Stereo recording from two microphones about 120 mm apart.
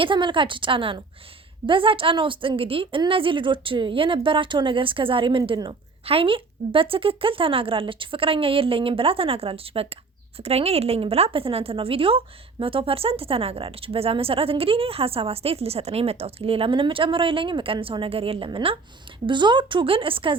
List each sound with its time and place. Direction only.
0.0 s a woman's voice: 45° right (ahead or behind)